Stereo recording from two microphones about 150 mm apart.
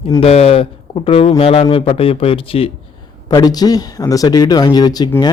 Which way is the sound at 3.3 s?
25° left (ahead or behind).